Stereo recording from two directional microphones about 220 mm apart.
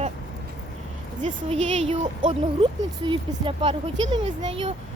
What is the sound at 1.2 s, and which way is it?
Speech, 30° right (ahead or behind).